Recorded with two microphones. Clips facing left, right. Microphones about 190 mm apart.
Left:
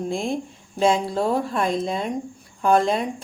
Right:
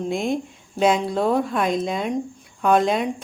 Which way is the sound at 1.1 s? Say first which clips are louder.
Right 2 dB; centre (ahead or behind).